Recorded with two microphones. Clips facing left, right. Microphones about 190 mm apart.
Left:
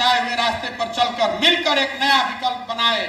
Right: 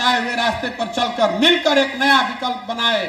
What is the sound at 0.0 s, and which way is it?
A man's voice, 50° right (ahead or behind).